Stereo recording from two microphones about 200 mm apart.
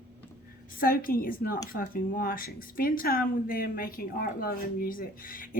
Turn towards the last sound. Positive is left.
turn(degrees=45)  # may be behind; listen again after turning